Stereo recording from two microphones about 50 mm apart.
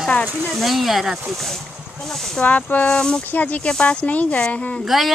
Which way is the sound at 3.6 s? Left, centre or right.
Centre.